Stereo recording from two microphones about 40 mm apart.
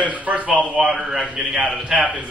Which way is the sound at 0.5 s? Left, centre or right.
Centre.